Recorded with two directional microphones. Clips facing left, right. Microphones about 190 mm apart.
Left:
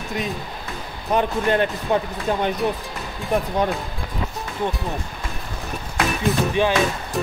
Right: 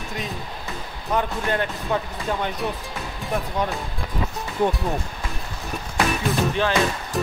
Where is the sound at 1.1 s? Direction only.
20° left (ahead or behind).